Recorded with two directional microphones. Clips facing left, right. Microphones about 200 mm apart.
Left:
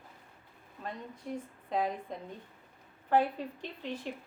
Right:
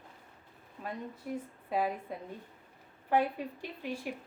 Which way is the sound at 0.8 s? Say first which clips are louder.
Right 2 dB; 5° right (ahead or behind).